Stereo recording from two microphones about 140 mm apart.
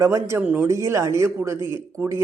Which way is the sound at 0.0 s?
20° right (ahead or behind).